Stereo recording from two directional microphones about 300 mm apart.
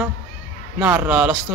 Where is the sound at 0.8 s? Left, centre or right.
Centre.